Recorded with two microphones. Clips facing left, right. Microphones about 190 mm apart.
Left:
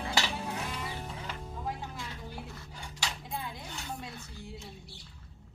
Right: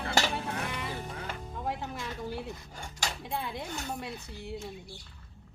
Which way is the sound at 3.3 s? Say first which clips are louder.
Right 5 dB; 70° right (ahead or behind).